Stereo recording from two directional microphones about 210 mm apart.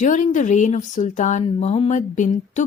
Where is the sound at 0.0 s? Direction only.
35° left (ahead or behind).